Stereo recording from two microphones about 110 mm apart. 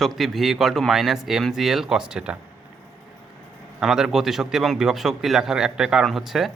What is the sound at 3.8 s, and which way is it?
A man's voice, 5° right (ahead or behind).